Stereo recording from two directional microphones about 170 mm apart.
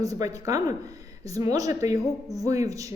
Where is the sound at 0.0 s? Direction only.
20° right (ahead or behind).